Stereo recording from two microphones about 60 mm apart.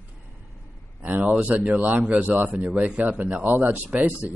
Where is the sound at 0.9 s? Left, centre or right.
Right.